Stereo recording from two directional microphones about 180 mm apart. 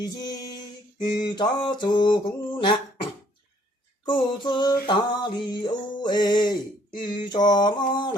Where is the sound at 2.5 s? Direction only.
25° left (ahead or behind).